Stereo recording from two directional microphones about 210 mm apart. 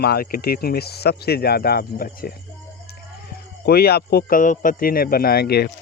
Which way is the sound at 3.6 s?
45° left (ahead or behind).